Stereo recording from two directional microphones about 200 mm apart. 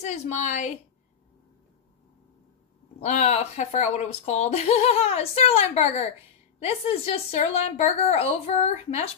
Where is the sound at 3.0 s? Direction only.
35° left (ahead or behind).